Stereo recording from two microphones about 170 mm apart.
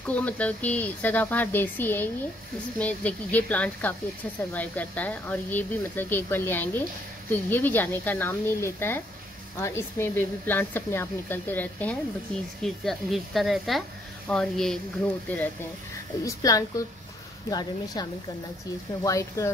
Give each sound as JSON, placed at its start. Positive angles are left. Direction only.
{"t": 0.1, "sound": "speech", "side_deg": 10}
{"t": 16.3, "sound": "a woman's voice", "side_deg": 20}
{"t": 19.0, "sound": "a woman's voice", "side_deg": 20}